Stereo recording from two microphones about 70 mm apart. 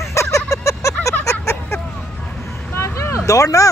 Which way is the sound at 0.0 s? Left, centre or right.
Left.